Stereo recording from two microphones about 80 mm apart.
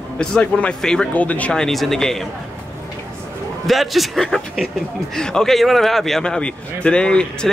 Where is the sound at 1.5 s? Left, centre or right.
Centre.